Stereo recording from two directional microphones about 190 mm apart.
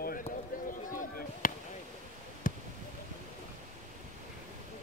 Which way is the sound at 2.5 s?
45° left (ahead or behind).